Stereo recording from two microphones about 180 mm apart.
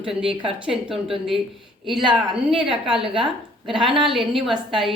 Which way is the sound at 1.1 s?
Centre (ahead or behind).